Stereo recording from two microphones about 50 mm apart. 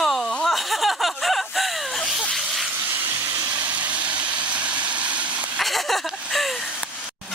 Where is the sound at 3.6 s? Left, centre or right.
Right.